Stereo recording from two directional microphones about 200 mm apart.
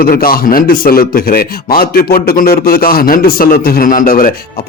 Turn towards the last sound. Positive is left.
turn(degrees=45)  # may be behind; listen again after turning